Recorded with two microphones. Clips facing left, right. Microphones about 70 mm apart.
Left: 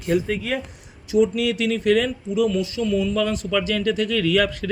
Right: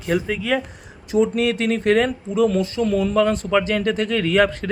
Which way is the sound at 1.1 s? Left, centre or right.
Right.